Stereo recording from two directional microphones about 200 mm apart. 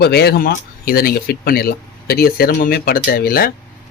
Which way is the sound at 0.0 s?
55° left (ahead or behind).